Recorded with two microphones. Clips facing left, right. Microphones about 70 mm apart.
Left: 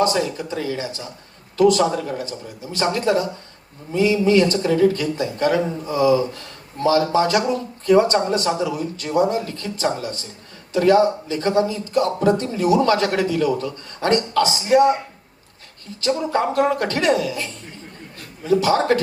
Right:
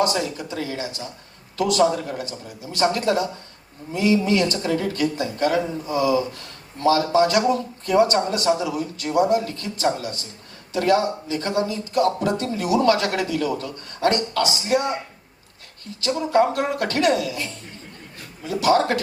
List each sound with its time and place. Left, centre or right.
0.0 s speech: left
16.0 s speech: left